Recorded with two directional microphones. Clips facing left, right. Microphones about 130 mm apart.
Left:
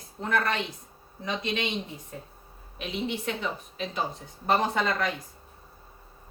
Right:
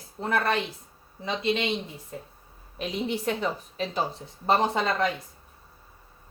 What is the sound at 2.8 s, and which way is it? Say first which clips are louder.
A woman's voice: right 2 dB; 40° right (ahead or behind).